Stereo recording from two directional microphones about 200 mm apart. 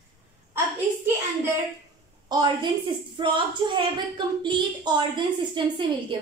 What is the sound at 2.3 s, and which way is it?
A woman's voice, 20° right (ahead or behind).